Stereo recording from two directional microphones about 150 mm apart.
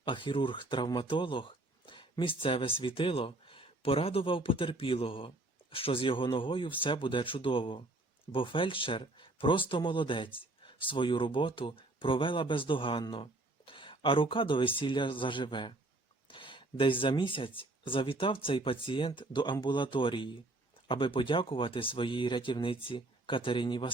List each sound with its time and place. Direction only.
0.0 s speech: 35° left (ahead or behind)